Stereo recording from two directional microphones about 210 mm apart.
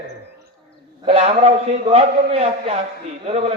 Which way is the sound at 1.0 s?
30° right (ahead or behind).